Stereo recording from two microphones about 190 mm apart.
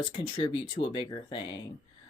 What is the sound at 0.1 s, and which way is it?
Speech, 25° left (ahead or behind).